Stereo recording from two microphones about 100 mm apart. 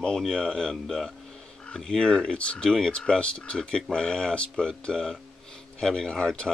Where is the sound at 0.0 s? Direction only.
5° left (ahead or behind).